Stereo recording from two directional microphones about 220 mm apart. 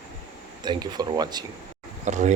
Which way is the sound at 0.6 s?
20° right (ahead or behind).